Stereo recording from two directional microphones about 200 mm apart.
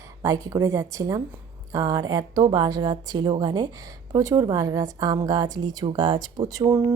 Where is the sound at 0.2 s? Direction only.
15° right (ahead or behind).